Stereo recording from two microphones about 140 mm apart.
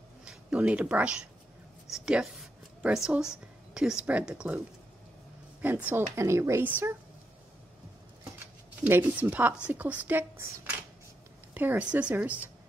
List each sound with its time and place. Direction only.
0.2 s speech: 5° right (ahead or behind)
5.6 s speech: 10° right (ahead or behind)
8.8 s speech: 15° right (ahead or behind)